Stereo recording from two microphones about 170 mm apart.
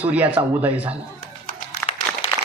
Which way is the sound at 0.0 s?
10° right (ahead or behind).